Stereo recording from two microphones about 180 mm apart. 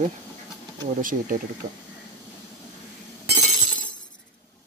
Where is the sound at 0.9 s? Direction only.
50° right (ahead or behind).